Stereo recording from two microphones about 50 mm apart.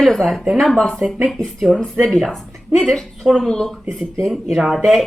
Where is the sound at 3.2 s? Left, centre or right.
Right.